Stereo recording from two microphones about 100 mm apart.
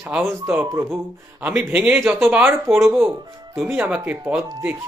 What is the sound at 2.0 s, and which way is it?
Speech, 25° right (ahead or behind).